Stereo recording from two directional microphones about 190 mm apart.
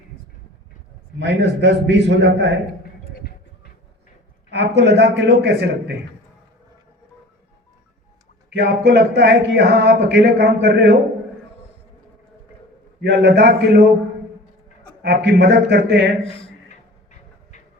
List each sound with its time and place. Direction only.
1.2 s a man's voice: 65° right (ahead or behind)
4.5 s speech: 65° right (ahead or behind)
8.4 s speech: 60° right (ahead or behind)
13.0 s speech: 60° right (ahead or behind)
15.0 s speech: 60° right (ahead or behind)